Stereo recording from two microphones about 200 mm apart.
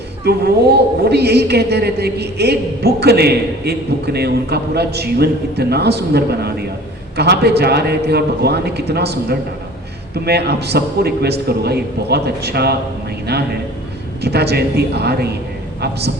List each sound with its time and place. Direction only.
0.3 s a woman's voice: 55° right (ahead or behind)